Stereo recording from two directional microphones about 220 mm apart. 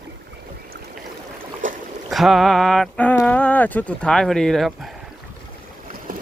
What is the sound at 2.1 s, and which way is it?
Speech, centre (ahead or behind).